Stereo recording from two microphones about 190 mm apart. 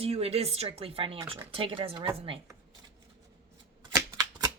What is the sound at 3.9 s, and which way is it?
Shuffling cards, 15° right (ahead or behind).